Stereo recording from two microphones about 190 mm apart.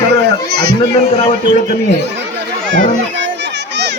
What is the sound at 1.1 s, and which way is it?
Speech, 35° left (ahead or behind).